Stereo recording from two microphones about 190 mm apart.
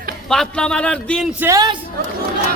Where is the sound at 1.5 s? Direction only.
20° right (ahead or behind).